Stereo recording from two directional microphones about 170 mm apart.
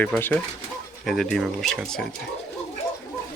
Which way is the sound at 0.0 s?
10° left (ahead or behind).